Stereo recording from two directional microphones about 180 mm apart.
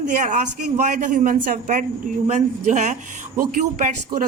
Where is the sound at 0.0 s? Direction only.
45° right (ahead or behind).